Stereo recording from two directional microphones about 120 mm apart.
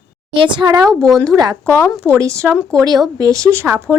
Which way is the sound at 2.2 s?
25° right (ahead or behind).